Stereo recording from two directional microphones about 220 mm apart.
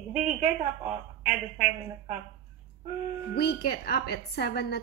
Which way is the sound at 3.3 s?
45° left (ahead or behind).